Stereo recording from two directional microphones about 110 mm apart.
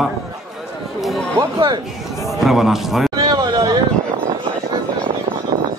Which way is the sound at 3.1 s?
35° right (ahead or behind).